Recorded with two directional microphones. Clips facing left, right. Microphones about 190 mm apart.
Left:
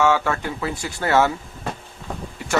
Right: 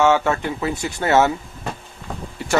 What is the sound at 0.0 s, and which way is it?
Speech, 25° right (ahead or behind).